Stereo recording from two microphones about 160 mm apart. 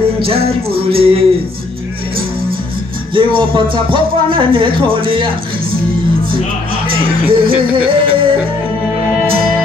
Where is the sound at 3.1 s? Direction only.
30° right (ahead or behind).